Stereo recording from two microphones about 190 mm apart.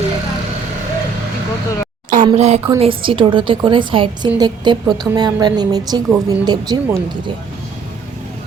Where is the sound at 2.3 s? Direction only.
35° right (ahead or behind).